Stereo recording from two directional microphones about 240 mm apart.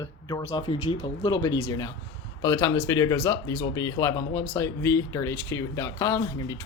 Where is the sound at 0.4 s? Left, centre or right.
Centre.